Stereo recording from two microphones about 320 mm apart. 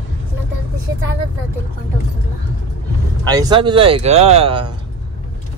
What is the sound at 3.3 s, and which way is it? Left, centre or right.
Speech, centre.